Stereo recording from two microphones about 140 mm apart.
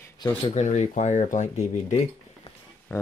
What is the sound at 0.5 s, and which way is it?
Speech, 55° left (ahead or behind).